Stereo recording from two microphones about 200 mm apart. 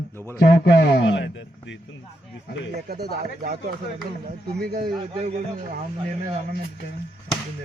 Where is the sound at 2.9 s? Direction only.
50° right (ahead or behind).